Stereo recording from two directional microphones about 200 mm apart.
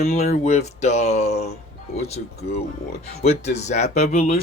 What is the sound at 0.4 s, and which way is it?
Speech, 35° left (ahead or behind).